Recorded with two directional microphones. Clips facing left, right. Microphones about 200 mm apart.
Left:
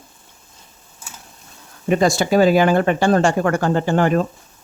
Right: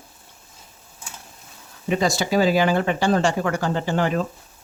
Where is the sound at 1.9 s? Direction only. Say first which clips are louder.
Left 5 dB; 50° left (ahead or behind).